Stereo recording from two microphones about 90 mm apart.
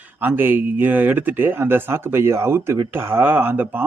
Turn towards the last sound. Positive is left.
turn(degrees=-25)  # may be behind; listen again after turning